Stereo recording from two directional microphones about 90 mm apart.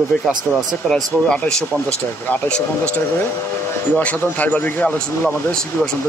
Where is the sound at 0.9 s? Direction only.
10° left (ahead or behind).